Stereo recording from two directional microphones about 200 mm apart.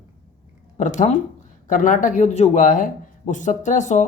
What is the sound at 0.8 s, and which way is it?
Speech, 35° left (ahead or behind).